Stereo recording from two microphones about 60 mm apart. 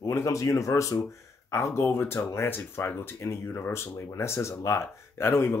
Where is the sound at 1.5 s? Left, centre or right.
Left.